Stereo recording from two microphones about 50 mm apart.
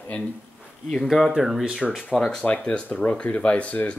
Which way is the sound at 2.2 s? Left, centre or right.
Centre.